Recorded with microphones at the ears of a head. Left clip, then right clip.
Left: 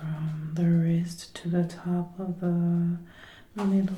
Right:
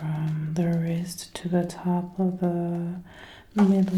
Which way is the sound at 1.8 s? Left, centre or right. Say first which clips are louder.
Right 5 dB; right.